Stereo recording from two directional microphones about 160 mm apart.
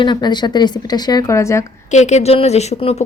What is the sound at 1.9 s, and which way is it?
Speech, 45° left (ahead or behind).